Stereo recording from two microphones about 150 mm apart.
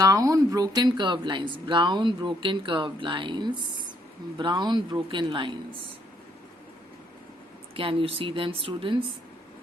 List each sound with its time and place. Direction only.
0.0 s speech: 25° right (ahead or behind)
7.8 s speech: 35° right (ahead or behind)